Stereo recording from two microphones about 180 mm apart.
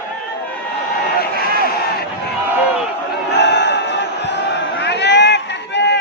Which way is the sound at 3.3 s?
75° left (ahead or behind).